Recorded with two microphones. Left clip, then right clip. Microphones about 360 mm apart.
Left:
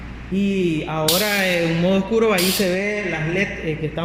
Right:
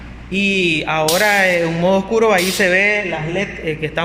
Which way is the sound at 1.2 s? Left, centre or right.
Centre.